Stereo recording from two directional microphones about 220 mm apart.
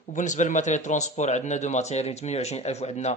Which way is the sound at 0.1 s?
35° left (ahead or behind).